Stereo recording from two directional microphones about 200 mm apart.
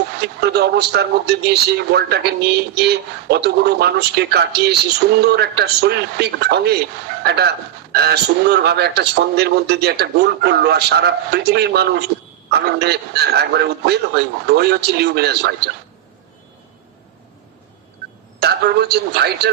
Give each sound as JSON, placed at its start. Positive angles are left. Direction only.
{"t": 0.2, "sound": "a man's voice", "side_deg": -55}
{"t": 18.4, "sound": "a man's voice", "side_deg": -55}